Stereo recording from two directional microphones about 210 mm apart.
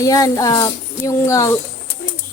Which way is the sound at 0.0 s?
15° left (ahead or behind).